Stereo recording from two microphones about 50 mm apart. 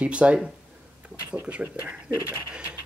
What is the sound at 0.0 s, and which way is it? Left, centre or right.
Speech, right.